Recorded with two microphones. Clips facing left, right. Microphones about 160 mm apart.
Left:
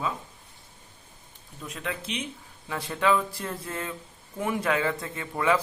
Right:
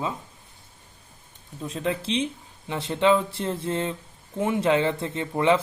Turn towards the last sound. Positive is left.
turn(degrees=-25)  # may be behind; listen again after turning